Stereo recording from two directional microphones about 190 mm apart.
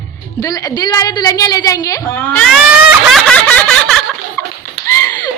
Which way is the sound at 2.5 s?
Centre (ahead or behind).